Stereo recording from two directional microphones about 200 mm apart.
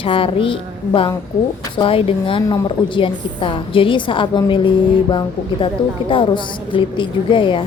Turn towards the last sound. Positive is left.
turn(degrees=25)  # may be behind; listen again after turning